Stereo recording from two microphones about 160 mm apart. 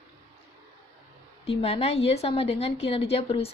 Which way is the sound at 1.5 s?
40° left (ahead or behind).